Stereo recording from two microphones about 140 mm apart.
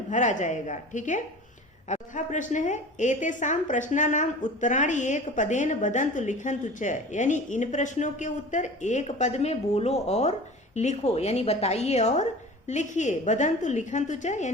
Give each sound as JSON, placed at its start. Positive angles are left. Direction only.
{"t": 0.1, "sound": "a woman's voice", "side_deg": 60}